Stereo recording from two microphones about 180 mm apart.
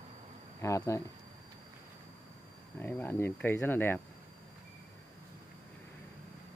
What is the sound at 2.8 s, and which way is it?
Speech, 10° left (ahead or behind).